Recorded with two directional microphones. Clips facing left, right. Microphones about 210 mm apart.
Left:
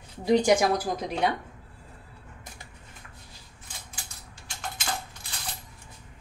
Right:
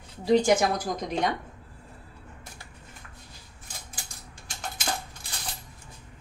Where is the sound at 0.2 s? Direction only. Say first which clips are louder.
Even; 15° left (ahead or behind).